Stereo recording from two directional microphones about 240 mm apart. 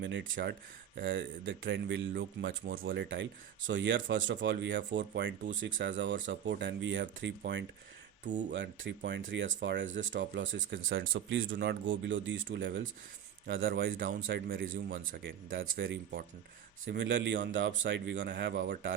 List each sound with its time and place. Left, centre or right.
0.0 s speech: right
8.2 s speech: right
8.5 s speech: right
13.9 s speech: right
15.8 s speech: right